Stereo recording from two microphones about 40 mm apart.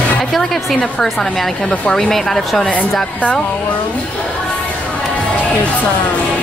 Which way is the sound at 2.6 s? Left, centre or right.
Left.